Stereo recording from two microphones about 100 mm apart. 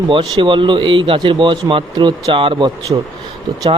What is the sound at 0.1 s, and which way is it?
Speech, 55° right (ahead or behind).